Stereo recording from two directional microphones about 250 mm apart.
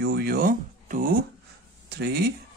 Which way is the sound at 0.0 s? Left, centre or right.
Right.